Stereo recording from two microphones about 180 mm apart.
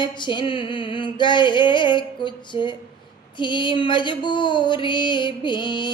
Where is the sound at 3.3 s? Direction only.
25° left (ahead or behind).